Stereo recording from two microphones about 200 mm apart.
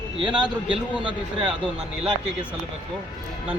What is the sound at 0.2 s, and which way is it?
A man's voice, 25° right (ahead or behind).